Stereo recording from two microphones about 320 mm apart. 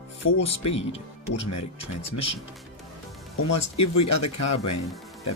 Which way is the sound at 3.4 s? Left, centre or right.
Left.